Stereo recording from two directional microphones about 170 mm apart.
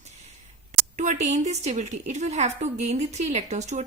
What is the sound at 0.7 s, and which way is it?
A woman's voice, 45° right (ahead or behind).